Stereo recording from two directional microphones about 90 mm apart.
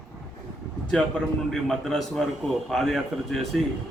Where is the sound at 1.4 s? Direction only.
5° left (ahead or behind).